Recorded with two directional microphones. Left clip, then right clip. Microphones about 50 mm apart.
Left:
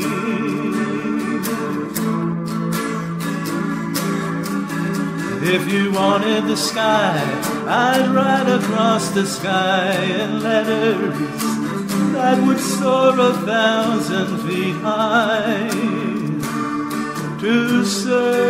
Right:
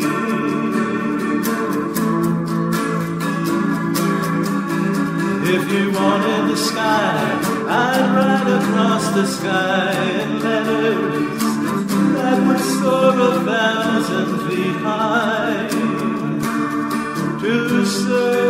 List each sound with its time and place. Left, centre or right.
6.8 s music: left
8.3 s music: left
13.0 s music: left